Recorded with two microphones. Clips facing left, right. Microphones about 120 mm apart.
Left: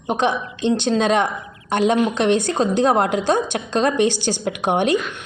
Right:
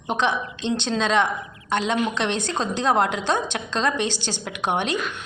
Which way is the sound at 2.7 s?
50° left (ahead or behind).